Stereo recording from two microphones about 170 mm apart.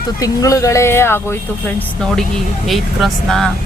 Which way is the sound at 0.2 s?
20° left (ahead or behind).